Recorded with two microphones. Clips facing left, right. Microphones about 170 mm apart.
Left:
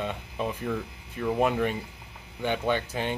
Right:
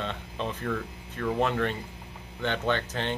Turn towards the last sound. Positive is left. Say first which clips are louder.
# left 1 dB
turn(degrees=10)  # may be behind; listen again after turning